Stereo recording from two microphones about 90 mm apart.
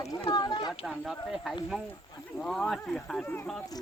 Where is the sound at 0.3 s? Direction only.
55° left (ahead or behind).